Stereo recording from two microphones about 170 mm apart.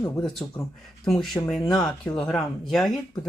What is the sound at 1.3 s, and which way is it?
Speech, 15° left (ahead or behind).